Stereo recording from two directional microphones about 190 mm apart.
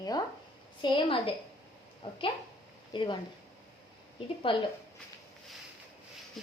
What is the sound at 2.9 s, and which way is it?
Speech, 25° left (ahead or behind).